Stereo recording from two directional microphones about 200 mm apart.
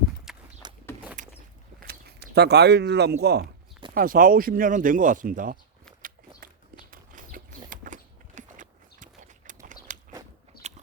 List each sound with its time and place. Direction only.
0.3 s a sound: centre (ahead or behind)
0.6 s vehicle: 20° right (ahead or behind)
1.2 s vehicle: 40° right (ahead or behind)
1.9 s speech: 55° right (ahead or behind)
6.0 s a sound: 45° right (ahead or behind)
10.5 s biting: 50° left (ahead or behind)